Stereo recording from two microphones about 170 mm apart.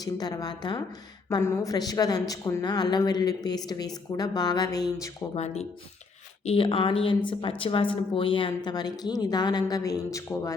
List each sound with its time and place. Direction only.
0.0 s a woman's voice: 20° left (ahead or behind)
5.3 s a woman's voice: 40° left (ahead or behind); by 10.5 s 20° left (ahead or behind)